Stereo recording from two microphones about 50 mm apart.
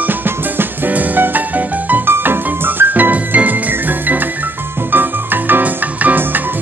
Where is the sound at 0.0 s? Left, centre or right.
Right.